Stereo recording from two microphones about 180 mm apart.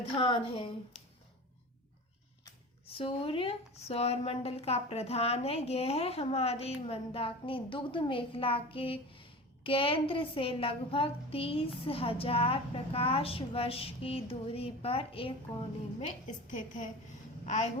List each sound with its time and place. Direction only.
0.0 s speech: 30° left (ahead or behind)
2.8 s speech: 30° left (ahead or behind)
16.0 s a woman's voice: 45° left (ahead or behind)